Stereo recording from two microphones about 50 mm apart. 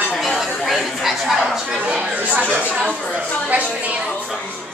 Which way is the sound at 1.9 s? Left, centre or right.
Centre.